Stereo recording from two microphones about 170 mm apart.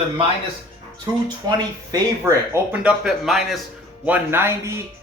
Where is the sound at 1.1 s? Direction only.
20° right (ahead or behind).